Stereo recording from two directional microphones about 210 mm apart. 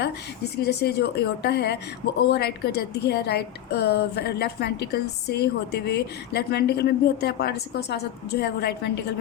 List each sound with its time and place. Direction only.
0.5 s a woman's voice: 50° left (ahead or behind)